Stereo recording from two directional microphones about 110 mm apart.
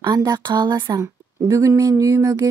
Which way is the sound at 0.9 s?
30° right (ahead or behind).